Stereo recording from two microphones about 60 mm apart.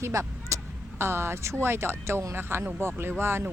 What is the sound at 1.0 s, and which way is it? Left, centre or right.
Speech, right.